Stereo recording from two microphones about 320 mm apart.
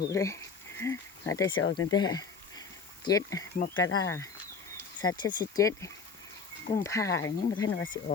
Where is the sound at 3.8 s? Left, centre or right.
Left.